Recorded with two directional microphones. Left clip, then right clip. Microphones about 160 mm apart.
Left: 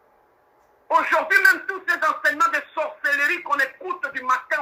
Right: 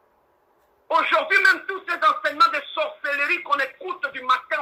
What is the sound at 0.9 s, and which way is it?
A man's voice, 30° right (ahead or behind).